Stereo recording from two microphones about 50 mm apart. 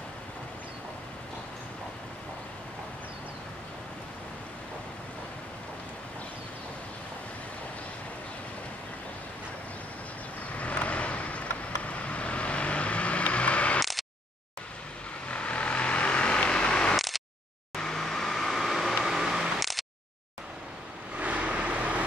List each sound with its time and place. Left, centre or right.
10.5 s vehicle: left
13.7 s a sound: centre
15.2 s vehicle: left
16.9 s a sound: centre
17.7 s vehicle: centre
21.2 s vehicle: right